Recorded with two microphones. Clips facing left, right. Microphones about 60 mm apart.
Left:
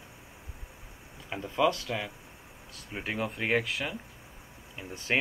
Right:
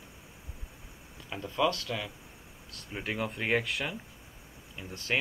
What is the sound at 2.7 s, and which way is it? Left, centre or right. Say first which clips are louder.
Speech: even; centre.